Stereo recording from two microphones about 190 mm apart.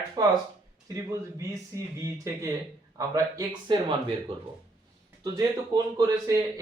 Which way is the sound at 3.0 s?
20° right (ahead or behind).